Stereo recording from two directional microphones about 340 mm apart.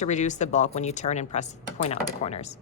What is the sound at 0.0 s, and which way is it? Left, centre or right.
Speech, left.